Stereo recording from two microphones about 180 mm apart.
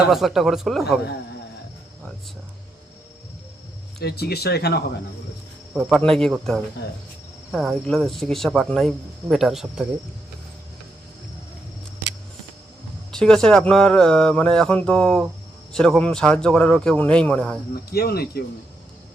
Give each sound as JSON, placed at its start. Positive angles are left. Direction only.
{"t": 0.1, "sound": "speech", "side_deg": 0}
{"t": 4.0, "sound": "speech", "side_deg": 60}
{"t": 6.0, "sound": "speech", "side_deg": 5}
{"t": 6.8, "sound": "cricket", "side_deg": 65}
{"t": 7.5, "sound": "speech", "side_deg": 0}
{"t": 13.1, "sound": "speech", "side_deg": 5}
{"t": 17.9, "sound": "speech", "side_deg": 60}